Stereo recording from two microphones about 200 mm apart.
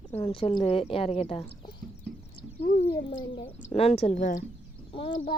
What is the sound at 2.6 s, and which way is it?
Speech, 40° left (ahead or behind).